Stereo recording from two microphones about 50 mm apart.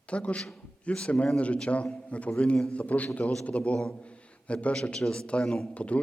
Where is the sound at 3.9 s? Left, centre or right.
Left.